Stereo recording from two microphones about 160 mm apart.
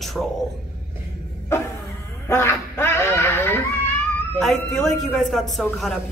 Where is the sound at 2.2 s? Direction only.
15° left (ahead or behind).